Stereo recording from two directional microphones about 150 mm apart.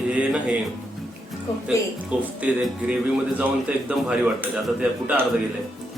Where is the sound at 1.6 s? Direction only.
5° right (ahead or behind).